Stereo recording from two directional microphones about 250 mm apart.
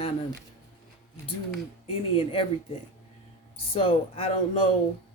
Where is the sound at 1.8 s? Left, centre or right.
Left.